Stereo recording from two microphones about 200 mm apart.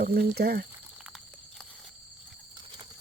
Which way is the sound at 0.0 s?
50° right (ahead or behind).